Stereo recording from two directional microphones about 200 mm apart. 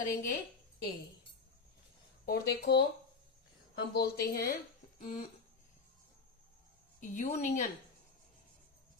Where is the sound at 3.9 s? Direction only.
50° left (ahead or behind).